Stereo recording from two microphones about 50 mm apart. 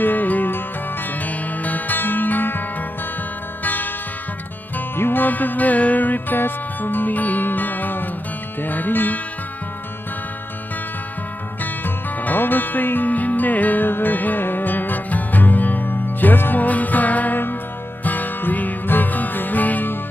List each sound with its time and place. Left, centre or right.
0.0 s music: left
3.6 s music: left
11.6 s music: left